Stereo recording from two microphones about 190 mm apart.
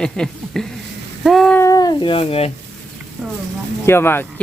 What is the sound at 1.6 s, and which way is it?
Speech, 20° left (ahead or behind).